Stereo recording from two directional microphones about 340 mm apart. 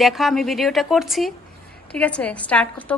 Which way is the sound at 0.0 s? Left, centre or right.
Centre.